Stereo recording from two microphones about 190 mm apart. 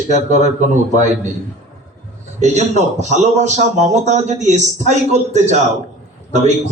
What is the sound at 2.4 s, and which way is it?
A man's voice, 40° right (ahead or behind).